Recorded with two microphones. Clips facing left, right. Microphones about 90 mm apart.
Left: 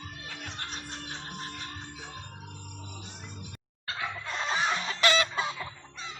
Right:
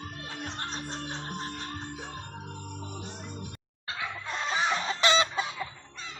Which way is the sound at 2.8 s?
40° right (ahead or behind).